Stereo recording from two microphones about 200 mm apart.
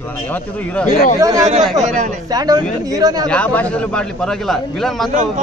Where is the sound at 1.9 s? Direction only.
40° right (ahead or behind).